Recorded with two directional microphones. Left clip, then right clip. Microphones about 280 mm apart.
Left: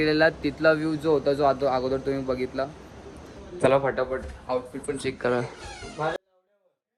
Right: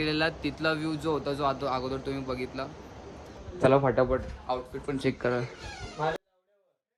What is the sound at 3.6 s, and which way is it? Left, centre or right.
Speech, centre.